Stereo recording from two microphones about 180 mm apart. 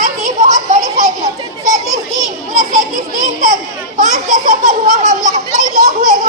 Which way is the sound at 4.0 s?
45° right (ahead or behind).